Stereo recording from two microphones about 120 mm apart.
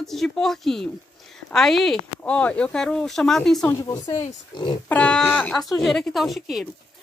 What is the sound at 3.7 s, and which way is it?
Speech, 30° left (ahead or behind).